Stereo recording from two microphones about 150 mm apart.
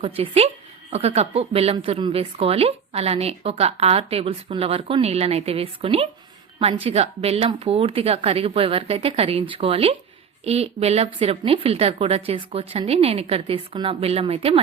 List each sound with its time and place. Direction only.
0.0 s a woman's voice: 40° right (ahead or behind)